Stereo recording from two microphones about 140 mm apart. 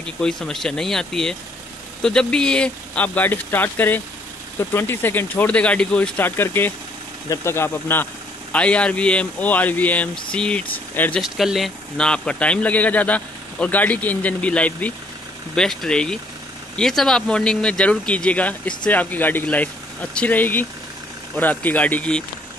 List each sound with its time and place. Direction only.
0.0 s a man's voice: 5° left (ahead or behind)
11.3 s a man's voice: centre (ahead or behind)